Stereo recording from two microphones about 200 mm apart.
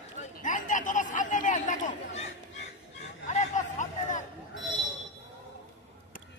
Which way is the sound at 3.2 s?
35° left (ahead or behind).